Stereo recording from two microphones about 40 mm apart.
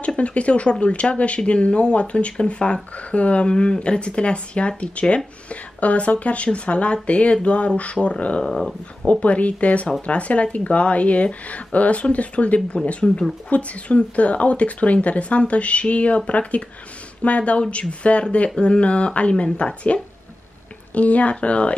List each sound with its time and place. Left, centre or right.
0.0 s a woman's voice: left
8.5 s speech: centre
9.0 s a woman's voice: left